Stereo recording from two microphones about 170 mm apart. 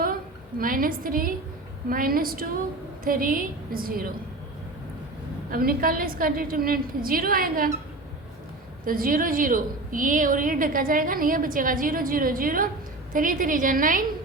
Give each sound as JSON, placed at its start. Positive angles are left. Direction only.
{"t": 0.6, "sound": "a woman's voice", "side_deg": -55}
{"t": 5.5, "sound": "a woman's voice", "side_deg": -60}
{"t": 8.8, "sound": "a woman's voice", "side_deg": -55}